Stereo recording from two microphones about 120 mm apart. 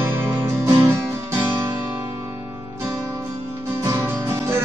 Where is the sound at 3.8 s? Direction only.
25° right (ahead or behind).